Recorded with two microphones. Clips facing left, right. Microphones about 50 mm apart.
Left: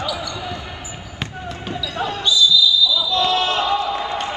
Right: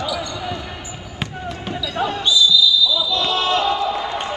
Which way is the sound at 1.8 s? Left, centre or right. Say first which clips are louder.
Right 1 dB; right.